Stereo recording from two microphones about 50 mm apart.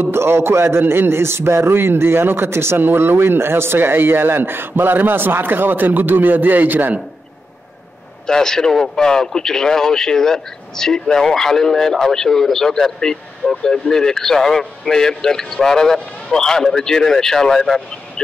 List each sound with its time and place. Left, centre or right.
0.0 s a man's voice: right
8.3 s speech: centre